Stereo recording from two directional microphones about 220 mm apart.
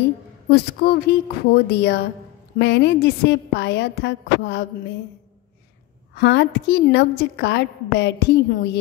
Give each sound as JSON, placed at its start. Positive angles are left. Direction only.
{"t": 0.5, "sound": "a woman's voice", "side_deg": 45}
{"t": 6.1, "sound": "a woman's voice", "side_deg": 50}